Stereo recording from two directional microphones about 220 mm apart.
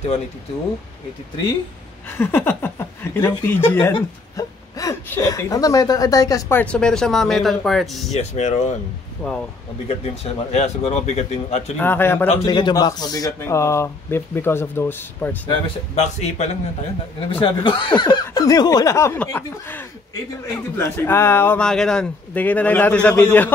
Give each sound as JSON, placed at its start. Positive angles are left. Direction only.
{"t": 2.0, "sound": "a woman's voice", "side_deg": 10}
{"t": 8.1, "sound": "a man's voice", "side_deg": 30}
{"t": 9.2, "sound": "a woman's voice", "side_deg": 5}
{"t": 9.8, "sound": "speech", "side_deg": 30}
{"t": 11.8, "sound": "a woman's voice", "side_deg": 10}
{"t": 15.6, "sound": "a man's voice", "side_deg": 30}